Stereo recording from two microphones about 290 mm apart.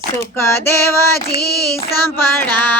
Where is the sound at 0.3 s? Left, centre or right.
Centre.